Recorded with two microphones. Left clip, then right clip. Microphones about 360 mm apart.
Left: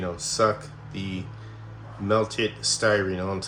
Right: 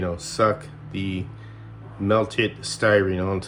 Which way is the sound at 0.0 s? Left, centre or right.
Right.